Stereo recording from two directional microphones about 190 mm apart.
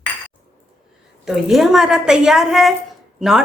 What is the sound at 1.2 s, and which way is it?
A woman's voice, centre (ahead or behind).